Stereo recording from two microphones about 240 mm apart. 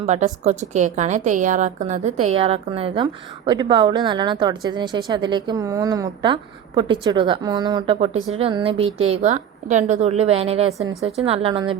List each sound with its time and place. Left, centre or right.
0.0 s a woman's voice: right